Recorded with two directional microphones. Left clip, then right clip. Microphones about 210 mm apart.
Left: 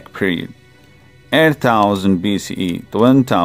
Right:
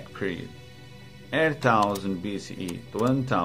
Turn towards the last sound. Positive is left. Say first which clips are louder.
# left 12 dB
turn(degrees=55)  # may be behind; listen again after turning